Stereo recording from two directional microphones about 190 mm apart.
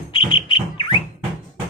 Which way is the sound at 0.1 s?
25° left (ahead or behind).